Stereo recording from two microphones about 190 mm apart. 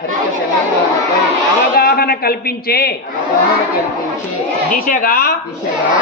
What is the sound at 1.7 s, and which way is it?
A man's voice, 55° left (ahead or behind).